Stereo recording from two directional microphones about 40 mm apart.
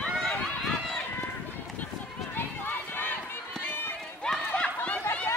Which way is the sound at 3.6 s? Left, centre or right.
Left.